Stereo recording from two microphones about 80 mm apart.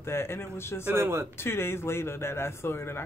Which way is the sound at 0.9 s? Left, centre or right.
Right.